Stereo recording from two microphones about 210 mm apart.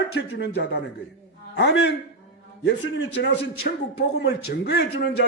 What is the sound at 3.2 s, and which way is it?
Speech, 55° left (ahead or behind).